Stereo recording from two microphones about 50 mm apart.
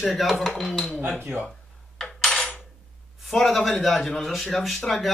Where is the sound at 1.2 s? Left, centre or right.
Right.